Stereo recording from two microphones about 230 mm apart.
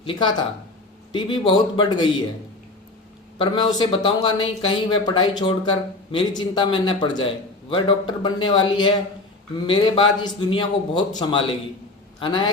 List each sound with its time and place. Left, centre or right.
0.0 s speech: centre
3.3 s speech: left